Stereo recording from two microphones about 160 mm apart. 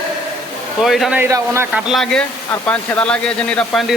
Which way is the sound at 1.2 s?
15° right (ahead or behind).